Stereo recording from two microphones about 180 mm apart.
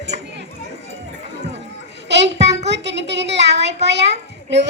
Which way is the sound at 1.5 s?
80° right.